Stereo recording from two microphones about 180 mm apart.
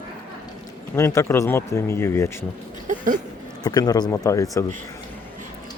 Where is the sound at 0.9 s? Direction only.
15° left (ahead or behind).